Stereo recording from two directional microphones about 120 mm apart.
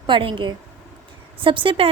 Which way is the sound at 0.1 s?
45° right (ahead or behind).